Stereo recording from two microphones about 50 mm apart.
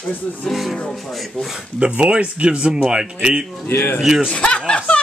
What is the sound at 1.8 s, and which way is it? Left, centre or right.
A woman's voice, right.